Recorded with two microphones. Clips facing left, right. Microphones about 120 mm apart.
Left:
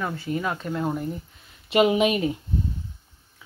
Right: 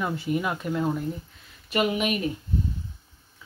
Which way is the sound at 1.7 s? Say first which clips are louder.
Left 6 dB; 25° left (ahead or behind).